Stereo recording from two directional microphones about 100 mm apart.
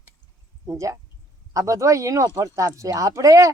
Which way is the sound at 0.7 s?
30° right (ahead or behind).